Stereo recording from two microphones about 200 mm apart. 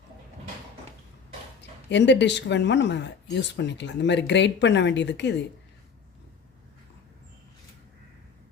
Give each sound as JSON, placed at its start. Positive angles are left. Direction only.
{"t": 1.9, "sound": "speech", "side_deg": 60}